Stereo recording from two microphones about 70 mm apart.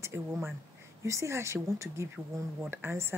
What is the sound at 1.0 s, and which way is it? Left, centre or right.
A woman's voice, right.